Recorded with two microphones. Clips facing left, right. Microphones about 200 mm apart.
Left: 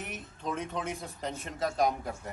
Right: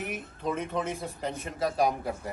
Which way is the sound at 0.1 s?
5° right (ahead or behind).